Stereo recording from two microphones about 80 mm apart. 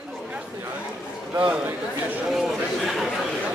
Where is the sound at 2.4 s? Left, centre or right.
Centre.